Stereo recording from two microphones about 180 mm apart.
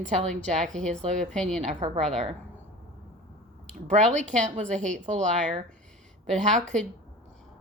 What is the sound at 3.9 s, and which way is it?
A woman's voice, 40° right (ahead or behind).